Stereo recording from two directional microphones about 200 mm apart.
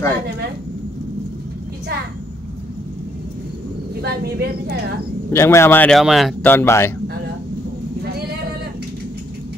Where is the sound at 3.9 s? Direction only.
55° right (ahead or behind).